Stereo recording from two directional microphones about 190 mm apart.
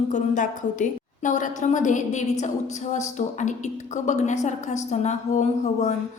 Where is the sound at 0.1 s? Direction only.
40° left (ahead or behind).